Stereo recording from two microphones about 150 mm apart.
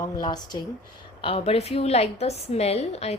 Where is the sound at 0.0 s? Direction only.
30° left (ahead or behind).